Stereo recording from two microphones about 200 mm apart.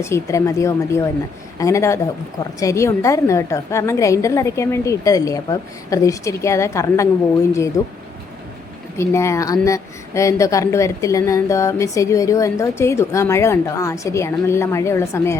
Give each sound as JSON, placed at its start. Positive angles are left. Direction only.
{"t": 0.0, "sound": "speech", "side_deg": 15}
{"t": 9.0, "sound": "speech", "side_deg": 15}